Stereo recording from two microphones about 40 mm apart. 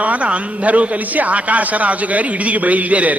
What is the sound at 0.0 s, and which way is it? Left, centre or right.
A man's voice, right.